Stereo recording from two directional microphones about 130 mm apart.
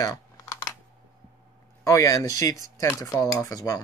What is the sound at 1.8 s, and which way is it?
Speech, 25° left (ahead or behind).